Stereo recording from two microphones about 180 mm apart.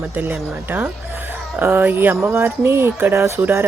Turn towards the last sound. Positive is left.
turn(degrees=-15)  # may be behind; listen again after turning